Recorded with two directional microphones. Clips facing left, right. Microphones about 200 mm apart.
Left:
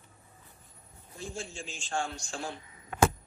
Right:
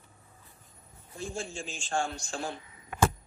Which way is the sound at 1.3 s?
50° right (ahead or behind).